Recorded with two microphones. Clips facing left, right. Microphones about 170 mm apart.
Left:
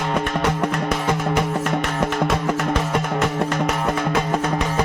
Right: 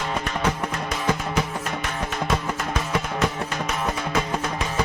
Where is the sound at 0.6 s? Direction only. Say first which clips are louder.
Left 5 dB; 60° left (ahead or behind).